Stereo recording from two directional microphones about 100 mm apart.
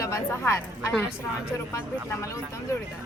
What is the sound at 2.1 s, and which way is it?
Speech, 30° left (ahead or behind).